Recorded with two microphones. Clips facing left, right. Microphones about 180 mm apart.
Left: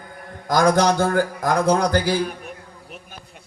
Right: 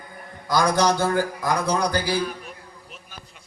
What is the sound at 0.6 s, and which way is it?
A man's voice, 50° left (ahead or behind).